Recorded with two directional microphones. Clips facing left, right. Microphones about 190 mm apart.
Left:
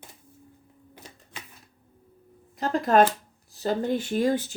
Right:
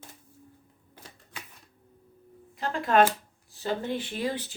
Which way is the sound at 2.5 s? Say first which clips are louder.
Left 3 dB; 40° left (ahead or behind).